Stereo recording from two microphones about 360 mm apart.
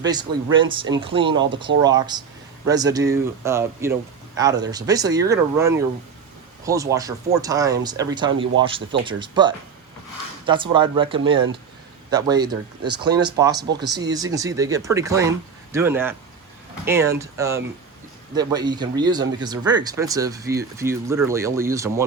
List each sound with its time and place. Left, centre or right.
0.0 s speech: centre
13.8 s speech: right
14.1 s speech: centre